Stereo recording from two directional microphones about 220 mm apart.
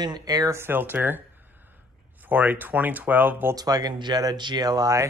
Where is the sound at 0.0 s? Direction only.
20° right (ahead or behind).